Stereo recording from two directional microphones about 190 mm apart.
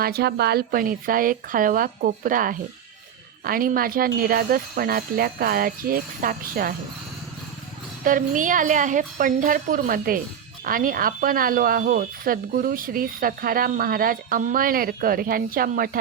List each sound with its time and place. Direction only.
0.0 s speech: 55° right (ahead or behind)
8.0 s speech: 45° right (ahead or behind)